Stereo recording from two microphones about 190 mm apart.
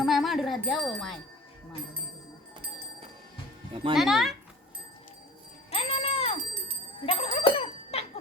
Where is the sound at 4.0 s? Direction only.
Centre (ahead or behind).